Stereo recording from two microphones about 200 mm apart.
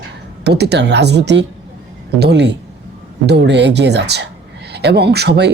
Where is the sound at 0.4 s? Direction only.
55° right (ahead or behind).